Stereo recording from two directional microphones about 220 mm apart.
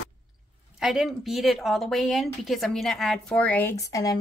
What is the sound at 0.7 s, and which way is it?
Speech, centre (ahead or behind).